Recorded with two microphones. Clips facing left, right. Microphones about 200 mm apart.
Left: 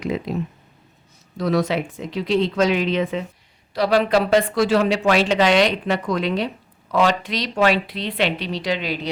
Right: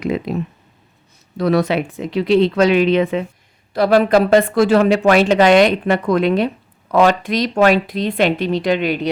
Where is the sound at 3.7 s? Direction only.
50° right (ahead or behind).